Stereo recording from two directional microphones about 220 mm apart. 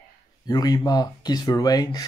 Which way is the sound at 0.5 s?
15° left (ahead or behind).